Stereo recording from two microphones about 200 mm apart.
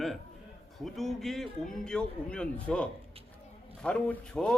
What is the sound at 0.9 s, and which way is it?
A man's voice, centre (ahead or behind).